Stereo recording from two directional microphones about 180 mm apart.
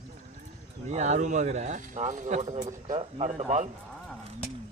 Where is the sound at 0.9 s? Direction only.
40° right (ahead or behind).